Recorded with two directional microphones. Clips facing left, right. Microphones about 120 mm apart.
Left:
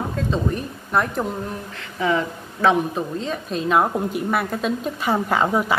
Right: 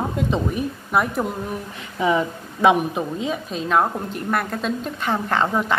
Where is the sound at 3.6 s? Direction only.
5° left (ahead or behind).